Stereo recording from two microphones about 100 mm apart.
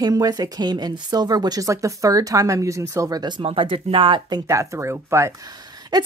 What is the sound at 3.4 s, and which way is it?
Speech, 60° right (ahead or behind).